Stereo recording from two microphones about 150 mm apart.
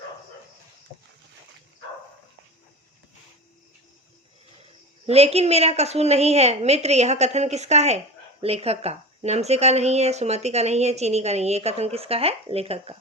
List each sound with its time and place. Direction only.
5.0 s a woman's voice: 45° right (ahead or behind)